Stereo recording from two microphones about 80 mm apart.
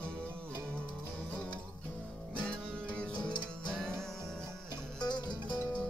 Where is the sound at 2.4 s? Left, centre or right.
Centre.